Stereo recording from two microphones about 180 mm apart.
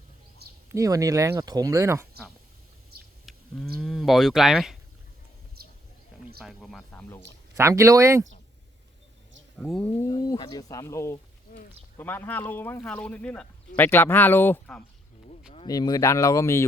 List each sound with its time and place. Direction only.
0.7 s speech: 15° right (ahead or behind)
3.3 s a sound: centre (ahead or behind)
3.8 s speech: centre (ahead or behind)
5.6 s horse: 60° right (ahead or behind)
6.4 s speech: centre (ahead or behind)
7.5 s speech: 15° right (ahead or behind)
9.6 s speech: 5° left (ahead or behind)
10.1 s a man's voice: 20° left (ahead or behind)
15.6 s a man's voice: 20° left (ahead or behind)